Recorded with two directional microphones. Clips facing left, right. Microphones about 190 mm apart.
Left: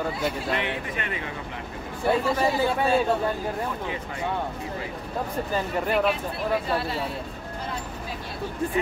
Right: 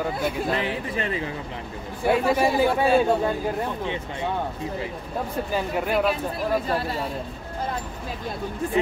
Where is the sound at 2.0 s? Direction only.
10° right (ahead or behind).